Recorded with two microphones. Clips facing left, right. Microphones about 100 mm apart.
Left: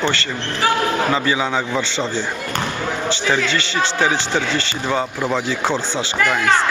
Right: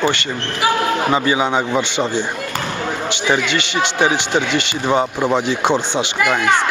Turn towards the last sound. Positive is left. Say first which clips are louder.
# right 1 dB
turn(degrees=-15)  # may be behind; listen again after turning